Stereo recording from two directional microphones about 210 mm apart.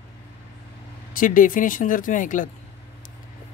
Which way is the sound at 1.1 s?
40° left (ahead or behind).